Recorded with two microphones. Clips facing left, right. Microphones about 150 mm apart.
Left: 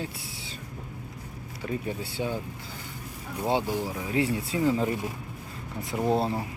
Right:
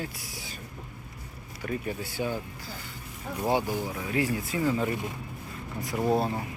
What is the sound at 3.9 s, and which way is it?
Speech, 25° left (ahead or behind).